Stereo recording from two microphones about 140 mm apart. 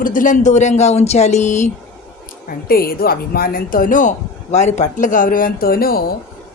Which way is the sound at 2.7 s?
90° left.